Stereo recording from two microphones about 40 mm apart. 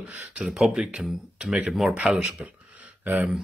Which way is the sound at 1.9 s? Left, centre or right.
Right.